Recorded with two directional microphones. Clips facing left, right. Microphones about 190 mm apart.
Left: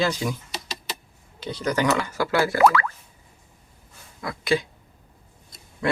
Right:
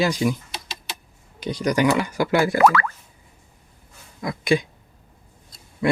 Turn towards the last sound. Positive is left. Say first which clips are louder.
# right 3 dB
turn(degrees=-15)  # may be behind; listen again after turning